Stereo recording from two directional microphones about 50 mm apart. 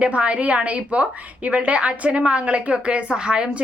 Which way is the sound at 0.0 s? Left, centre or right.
Right.